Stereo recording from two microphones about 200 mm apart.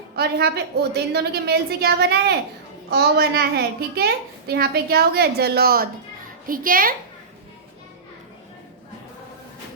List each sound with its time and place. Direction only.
0.2 s a child's voice: 55° right (ahead or behind)